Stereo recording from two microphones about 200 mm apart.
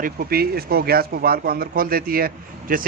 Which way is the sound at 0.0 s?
50° right (ahead or behind).